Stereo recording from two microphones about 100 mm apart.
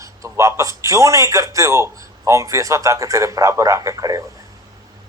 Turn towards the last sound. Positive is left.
turn(degrees=-35)  # may be behind; listen again after turning